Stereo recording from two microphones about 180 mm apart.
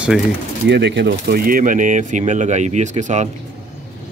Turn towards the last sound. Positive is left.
turn(degrees=-40)  # may be behind; listen again after turning